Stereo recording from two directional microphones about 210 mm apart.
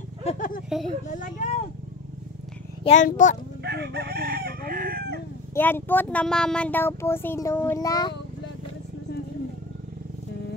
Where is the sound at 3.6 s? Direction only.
50° right (ahead or behind).